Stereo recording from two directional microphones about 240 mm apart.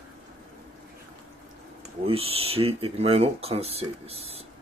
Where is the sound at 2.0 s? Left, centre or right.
Right.